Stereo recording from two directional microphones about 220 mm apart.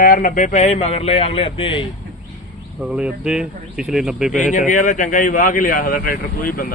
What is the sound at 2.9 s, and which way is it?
Speech, 5° right (ahead or behind).